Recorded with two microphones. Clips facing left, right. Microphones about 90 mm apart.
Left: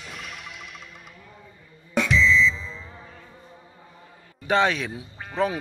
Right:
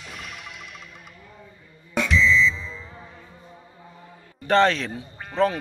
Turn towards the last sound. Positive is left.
turn(degrees=0)  # may be behind; listen again after turning